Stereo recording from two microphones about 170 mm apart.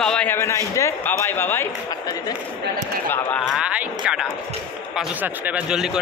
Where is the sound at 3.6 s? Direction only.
5° right (ahead or behind).